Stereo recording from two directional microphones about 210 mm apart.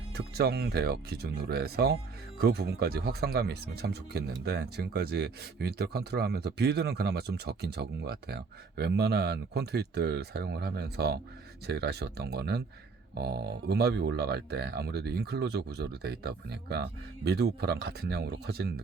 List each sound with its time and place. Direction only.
0.1 s speech: 50° right (ahead or behind)